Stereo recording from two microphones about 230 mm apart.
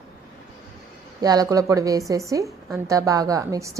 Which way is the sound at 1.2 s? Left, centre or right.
Centre.